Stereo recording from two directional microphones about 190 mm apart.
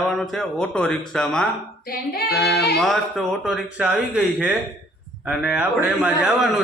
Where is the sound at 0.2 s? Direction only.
5° left (ahead or behind).